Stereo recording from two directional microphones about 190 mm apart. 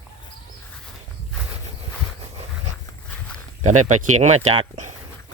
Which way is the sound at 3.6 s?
40° right (ahead or behind).